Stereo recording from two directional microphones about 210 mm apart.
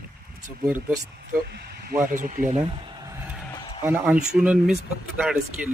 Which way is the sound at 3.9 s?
5° right (ahead or behind).